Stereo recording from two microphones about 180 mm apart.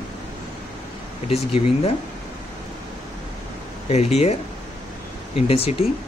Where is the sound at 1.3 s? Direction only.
30° left (ahead or behind).